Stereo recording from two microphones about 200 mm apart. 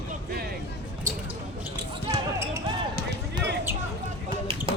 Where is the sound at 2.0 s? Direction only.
15° right (ahead or behind).